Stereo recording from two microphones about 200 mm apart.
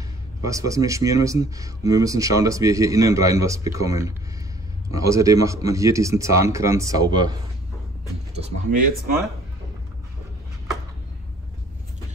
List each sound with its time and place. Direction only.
0.5 s speech: 15° right (ahead or behind)
8.4 s speech: 45° right (ahead or behind)